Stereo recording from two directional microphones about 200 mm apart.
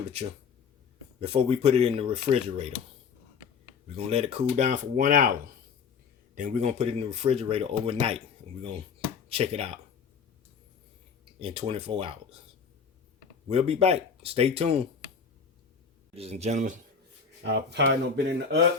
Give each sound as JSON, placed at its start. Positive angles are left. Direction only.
{"t": 0.2, "sound": "speech", "side_deg": -30}
{"t": 3.9, "sound": "speech", "side_deg": -30}
{"t": 9.3, "sound": "speech", "side_deg": -30}
{"t": 11.3, "sound": "speech", "side_deg": -25}
{"t": 13.5, "sound": "speech", "side_deg": -30}
{"t": 16.1, "sound": "speech", "side_deg": -30}
{"t": 17.4, "sound": "speech", "side_deg": -60}